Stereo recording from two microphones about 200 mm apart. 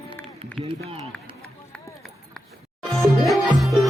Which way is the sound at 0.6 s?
30° right (ahead or behind).